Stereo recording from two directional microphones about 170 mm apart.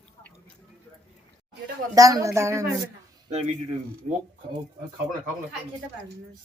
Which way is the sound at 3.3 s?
40° right (ahead or behind).